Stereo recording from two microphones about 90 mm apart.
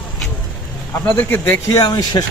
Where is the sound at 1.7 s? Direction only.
50° left (ahead or behind).